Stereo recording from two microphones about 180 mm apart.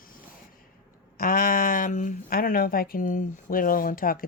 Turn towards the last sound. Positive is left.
turn(degrees=50)  # may be behind; listen again after turning